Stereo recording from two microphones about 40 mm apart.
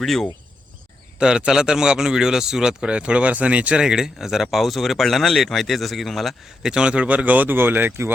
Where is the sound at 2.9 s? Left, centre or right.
Right.